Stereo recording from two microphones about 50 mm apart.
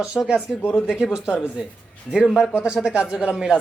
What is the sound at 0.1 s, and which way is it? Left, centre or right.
Speech, centre.